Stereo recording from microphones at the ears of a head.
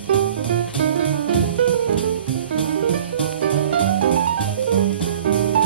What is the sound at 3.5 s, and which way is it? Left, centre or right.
Music, right.